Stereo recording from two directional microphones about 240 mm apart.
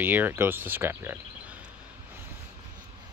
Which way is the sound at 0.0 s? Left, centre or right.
Centre.